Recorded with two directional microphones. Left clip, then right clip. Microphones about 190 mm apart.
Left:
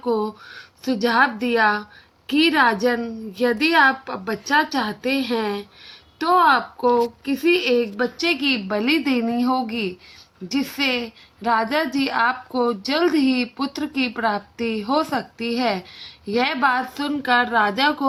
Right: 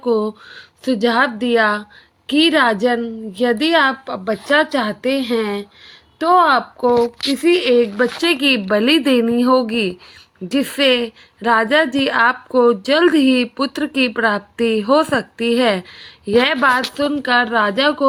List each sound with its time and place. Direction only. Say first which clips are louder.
0.0 s a woman's voice: right 5 dB; 30° right (ahead or behind)